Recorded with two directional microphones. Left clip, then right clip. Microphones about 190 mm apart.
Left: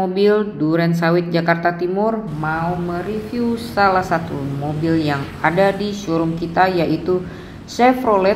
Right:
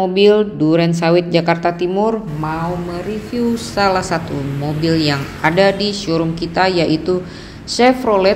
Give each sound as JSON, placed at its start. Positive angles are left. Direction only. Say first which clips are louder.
{"t": 0.1, "sound": "speech", "louder": "right 5 dB", "side_deg": -25}
{"t": 3.7, "sound": "speech", "louder": "left 1 dB", "side_deg": -40}